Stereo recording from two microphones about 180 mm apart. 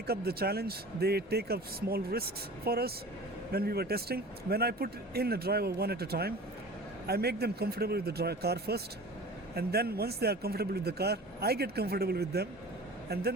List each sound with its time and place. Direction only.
0.1 s speech: 60° right (ahead or behind)